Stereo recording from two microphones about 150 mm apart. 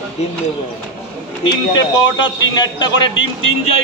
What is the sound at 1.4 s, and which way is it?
A man's voice, 30° left (ahead or behind).